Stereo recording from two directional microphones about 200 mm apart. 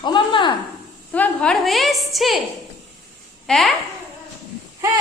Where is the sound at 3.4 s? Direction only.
Centre (ahead or behind).